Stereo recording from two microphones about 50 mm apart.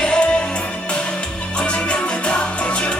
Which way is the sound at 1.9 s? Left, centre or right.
Centre.